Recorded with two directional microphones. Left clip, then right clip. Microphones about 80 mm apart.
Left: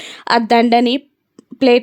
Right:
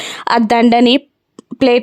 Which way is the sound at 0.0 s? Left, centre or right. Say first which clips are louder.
Right 1 dB; right.